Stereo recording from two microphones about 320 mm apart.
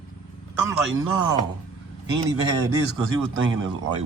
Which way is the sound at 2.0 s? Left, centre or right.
Centre.